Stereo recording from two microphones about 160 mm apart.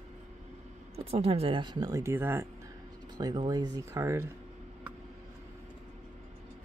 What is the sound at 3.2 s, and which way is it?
Speech, 25° right (ahead or behind).